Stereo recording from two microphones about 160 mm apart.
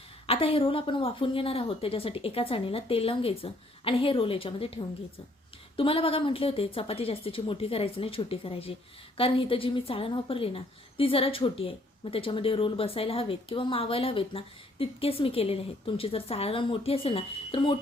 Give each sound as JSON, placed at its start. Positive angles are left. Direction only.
{"t": 0.3, "sound": "a woman's voice", "side_deg": 35}